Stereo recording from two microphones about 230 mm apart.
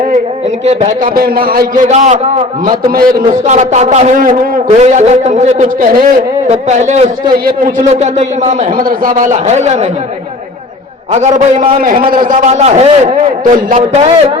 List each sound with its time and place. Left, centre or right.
0.6 s a man's voice: right
11.1 s a man's voice: right